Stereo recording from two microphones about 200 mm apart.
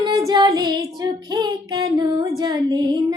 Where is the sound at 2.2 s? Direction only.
20° right (ahead or behind).